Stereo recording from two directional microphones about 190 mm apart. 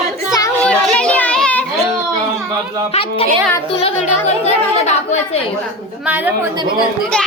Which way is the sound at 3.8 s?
35° left (ahead or behind).